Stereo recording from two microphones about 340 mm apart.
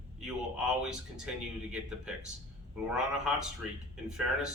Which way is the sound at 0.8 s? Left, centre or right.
Centre.